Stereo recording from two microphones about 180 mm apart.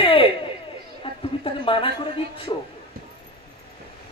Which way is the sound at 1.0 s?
30° left (ahead or behind).